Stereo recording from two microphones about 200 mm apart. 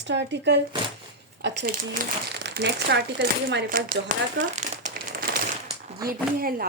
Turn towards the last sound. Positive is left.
turn(degrees=-45)  # may be behind; listen again after turning